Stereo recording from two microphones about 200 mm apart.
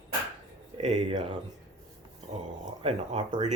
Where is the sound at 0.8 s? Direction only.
25° right (ahead or behind).